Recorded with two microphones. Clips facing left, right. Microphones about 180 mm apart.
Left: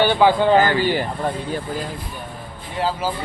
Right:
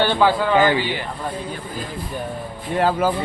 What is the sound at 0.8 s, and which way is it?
Speech, 45° left (ahead or behind).